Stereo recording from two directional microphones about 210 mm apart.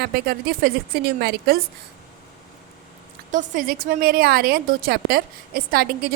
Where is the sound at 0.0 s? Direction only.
50° right (ahead or behind).